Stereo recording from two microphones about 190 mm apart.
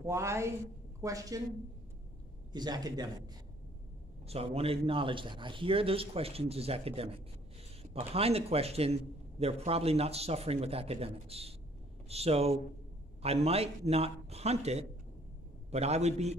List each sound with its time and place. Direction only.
0.0 s speech: 15° right (ahead or behind)
2.5 s a man's voice: 20° right (ahead or behind)
4.3 s a man's voice: 30° right (ahead or behind)